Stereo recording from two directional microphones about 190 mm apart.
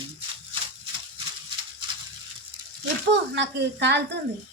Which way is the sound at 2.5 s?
25° right (ahead or behind).